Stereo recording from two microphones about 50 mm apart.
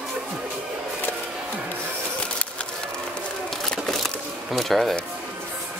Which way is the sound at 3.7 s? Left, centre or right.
Centre.